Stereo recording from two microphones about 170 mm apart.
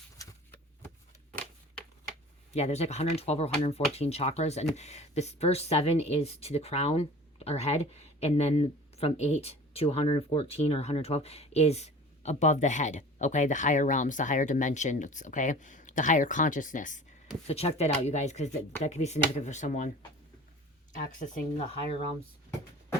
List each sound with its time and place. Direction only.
2.5 s a woman's voice: 40° left (ahead or behind)
17.4 s a woman's voice: 35° left (ahead or behind)
20.9 s speech: 50° left (ahead or behind)